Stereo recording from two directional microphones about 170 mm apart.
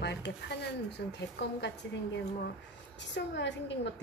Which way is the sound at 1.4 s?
75° left (ahead or behind).